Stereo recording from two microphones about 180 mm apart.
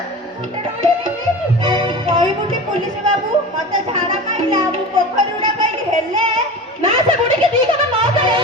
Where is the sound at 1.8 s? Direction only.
30° right (ahead or behind).